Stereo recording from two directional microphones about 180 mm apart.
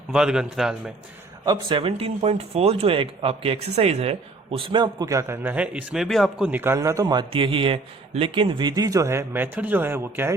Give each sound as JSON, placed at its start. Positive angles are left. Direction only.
{"t": 0.1, "sound": "a man's voice", "side_deg": -5}
{"t": 1.5, "sound": "speech", "side_deg": -30}